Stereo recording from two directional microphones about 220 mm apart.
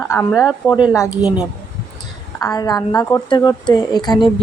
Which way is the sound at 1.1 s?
5° right (ahead or behind).